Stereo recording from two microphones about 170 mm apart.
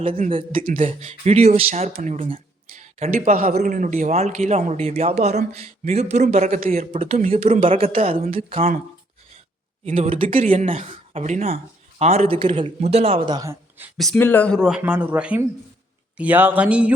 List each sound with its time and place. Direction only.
0.3 s speech: 30° right (ahead or behind)
0.6 s speech: 45° right (ahead or behind)
6.9 s speech: 35° right (ahead or behind)
9.8 s speech: 35° right (ahead or behind); by 13.9 s 15° right (ahead or behind)
13.9 s speech: centre (ahead or behind)
14.6 s speech: 5° right (ahead or behind)